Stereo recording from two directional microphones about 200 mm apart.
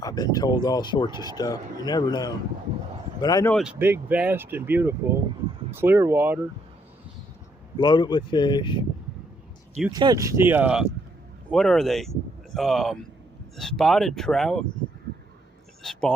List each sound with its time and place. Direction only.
0.0 s speech: 20° left (ahead or behind)
3.5 s speech: 5° right (ahead or behind)
7.8 s speech: 20° left (ahead or behind)
9.9 s speech: 20° right (ahead or behind); by 14.7 s centre (ahead or behind)
15.8 s a sound: centre (ahead or behind)